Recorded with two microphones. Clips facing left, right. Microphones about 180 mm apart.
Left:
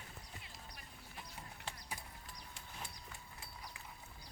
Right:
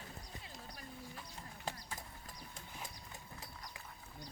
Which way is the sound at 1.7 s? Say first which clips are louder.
Right 7 dB; 40° right (ahead or behind).